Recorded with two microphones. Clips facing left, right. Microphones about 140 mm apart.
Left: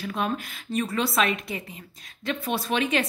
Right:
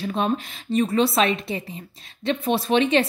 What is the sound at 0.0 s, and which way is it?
A woman's voice, 25° right (ahead or behind).